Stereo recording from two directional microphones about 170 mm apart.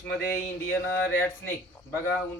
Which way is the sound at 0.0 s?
10° left (ahead or behind).